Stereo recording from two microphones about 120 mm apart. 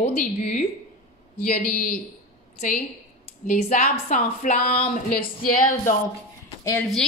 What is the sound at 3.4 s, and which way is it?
A woman's voice, 90° left.